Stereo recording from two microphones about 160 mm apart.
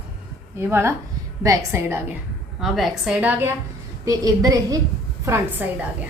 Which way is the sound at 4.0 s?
25° right (ahead or behind).